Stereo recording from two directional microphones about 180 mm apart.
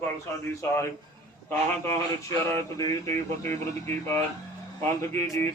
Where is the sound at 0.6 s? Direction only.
15° left (ahead or behind).